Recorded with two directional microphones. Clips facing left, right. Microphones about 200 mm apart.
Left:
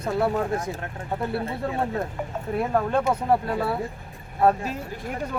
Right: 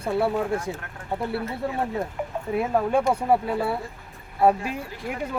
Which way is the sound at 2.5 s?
5° right (ahead or behind).